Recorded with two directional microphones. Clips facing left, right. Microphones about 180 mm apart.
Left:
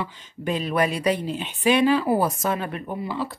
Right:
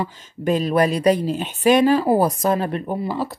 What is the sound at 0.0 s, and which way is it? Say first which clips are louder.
Speech: right 5 dB; 45° right (ahead or behind).